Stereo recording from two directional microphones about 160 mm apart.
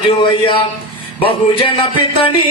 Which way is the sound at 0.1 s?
30° left (ahead or behind).